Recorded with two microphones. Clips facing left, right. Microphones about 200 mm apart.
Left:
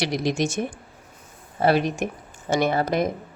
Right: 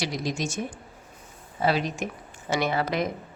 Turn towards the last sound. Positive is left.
turn(degrees=50)  # may be behind; listen again after turning